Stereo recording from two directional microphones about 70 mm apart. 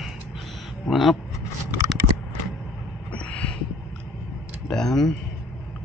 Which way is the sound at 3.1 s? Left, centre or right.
Centre.